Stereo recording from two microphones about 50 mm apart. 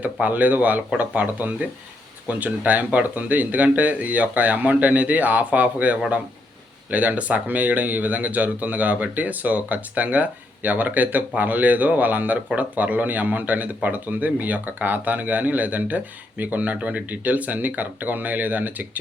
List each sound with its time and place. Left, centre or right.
0.0 s speech: right